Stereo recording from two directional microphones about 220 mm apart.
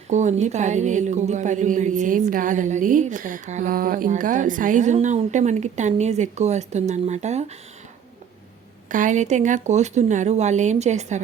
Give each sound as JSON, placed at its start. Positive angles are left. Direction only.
{"t": 0.1, "sound": "a woman's voice", "side_deg": -35}
{"t": 8.9, "sound": "a woman's voice", "side_deg": -35}